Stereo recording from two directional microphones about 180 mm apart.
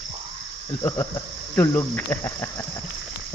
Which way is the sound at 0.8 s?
15° left (ahead or behind).